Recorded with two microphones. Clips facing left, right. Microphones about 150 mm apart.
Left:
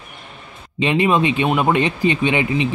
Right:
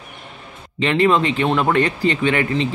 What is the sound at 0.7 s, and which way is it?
Speech, 15° left (ahead or behind).